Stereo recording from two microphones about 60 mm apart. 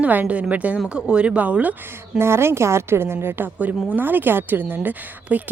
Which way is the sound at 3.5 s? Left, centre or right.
Right.